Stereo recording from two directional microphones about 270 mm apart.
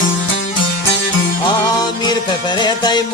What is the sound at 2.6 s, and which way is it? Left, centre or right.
Music, centre.